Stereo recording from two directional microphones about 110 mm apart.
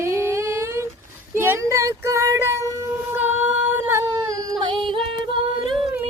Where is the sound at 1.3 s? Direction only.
20° right (ahead or behind).